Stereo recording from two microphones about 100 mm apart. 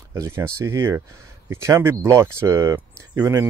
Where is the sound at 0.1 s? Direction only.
30° right (ahead or behind).